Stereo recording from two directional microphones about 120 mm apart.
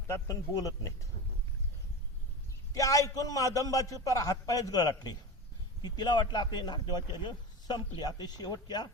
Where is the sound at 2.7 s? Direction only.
30° left (ahead or behind).